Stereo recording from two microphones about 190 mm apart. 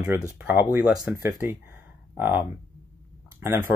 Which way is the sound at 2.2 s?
10° right (ahead or behind).